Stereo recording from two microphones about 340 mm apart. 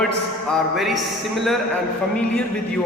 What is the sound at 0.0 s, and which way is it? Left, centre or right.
A man's voice, centre.